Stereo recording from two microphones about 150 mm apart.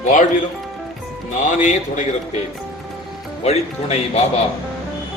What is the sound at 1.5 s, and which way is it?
Speech, 55° left (ahead or behind).